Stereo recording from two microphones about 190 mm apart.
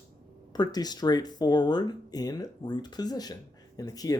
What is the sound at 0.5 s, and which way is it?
Speech, 20° left (ahead or behind).